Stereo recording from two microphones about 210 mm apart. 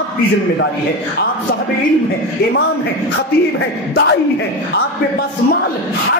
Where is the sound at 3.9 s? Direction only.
50° left (ahead or behind).